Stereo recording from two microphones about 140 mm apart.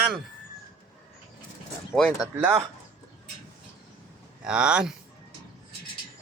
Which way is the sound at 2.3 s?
15° right (ahead or behind).